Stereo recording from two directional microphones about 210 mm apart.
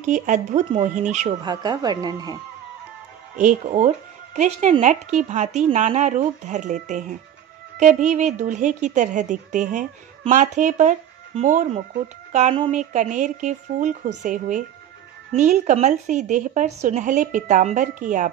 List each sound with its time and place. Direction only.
0.0 s speech: 35° right (ahead or behind)
1.4 s speech: 20° right (ahead or behind)
3.3 s speech: 35° right (ahead or behind)